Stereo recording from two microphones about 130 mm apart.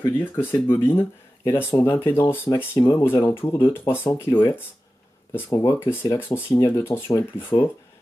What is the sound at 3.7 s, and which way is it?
Speech, 15° left (ahead or behind).